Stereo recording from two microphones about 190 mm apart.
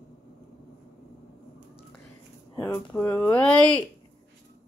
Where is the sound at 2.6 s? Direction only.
10° left (ahead or behind).